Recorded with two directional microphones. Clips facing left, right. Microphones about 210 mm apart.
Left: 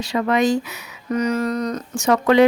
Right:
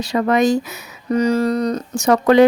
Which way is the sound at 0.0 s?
40° right (ahead or behind).